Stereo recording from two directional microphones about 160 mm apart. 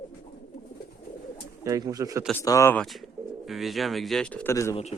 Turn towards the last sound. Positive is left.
turn(degrees=20)  # may be behind; listen again after turning